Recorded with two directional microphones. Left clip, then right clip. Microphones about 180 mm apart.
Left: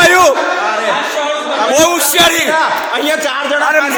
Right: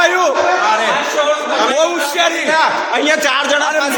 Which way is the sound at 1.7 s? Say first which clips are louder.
Left 4 dB; 25° left (ahead or behind).